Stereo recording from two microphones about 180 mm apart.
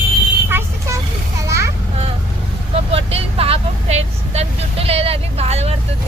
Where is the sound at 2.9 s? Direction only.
35° right (ahead or behind).